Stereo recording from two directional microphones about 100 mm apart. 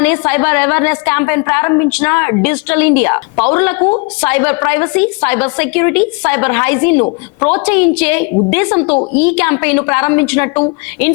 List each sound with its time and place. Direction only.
0.0 s a woman's voice: 20° left (ahead or behind)